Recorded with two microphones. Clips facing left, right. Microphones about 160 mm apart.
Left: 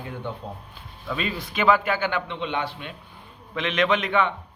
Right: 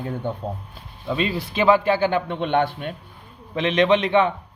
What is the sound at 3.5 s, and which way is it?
Speech, 35° right (ahead or behind).